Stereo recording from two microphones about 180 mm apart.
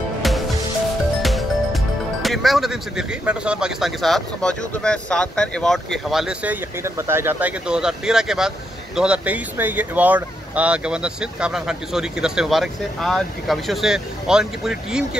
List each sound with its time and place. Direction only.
1.2 s music: centre (ahead or behind)
2.2 s speech: centre (ahead or behind)